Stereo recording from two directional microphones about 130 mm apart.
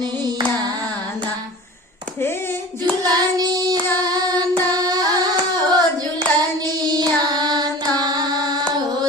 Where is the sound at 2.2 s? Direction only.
20° left (ahead or behind).